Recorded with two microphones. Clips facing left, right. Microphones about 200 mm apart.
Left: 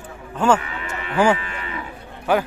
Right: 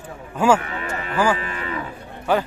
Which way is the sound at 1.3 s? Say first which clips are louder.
Right 3 dB; 35° right (ahead or behind).